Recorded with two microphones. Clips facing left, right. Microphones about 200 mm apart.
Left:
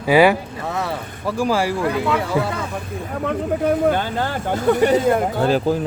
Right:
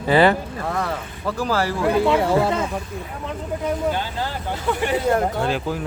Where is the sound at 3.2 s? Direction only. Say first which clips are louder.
Left 6 dB; 60° left (ahead or behind).